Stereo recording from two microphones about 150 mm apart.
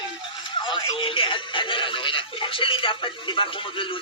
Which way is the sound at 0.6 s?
35° left (ahead or behind).